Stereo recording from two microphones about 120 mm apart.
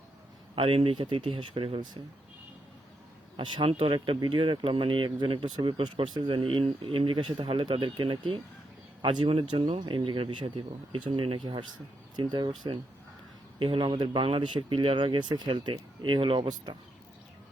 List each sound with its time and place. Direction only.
0.5 s speech: 50° right (ahead or behind)
3.3 s speech: 45° right (ahead or behind)
13.6 s speech: 45° right (ahead or behind)